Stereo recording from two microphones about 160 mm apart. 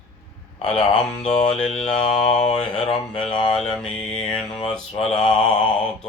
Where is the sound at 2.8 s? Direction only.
40° left (ahead or behind).